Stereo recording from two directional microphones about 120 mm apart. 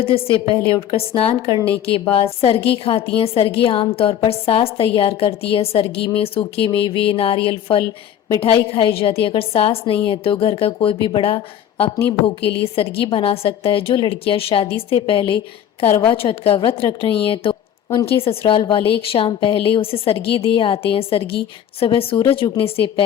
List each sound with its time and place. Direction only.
0.4 s a woman's voice: 50° left (ahead or behind)
17.2 s a sound: 50° left (ahead or behind)
18.2 s a woman's voice: 50° left (ahead or behind)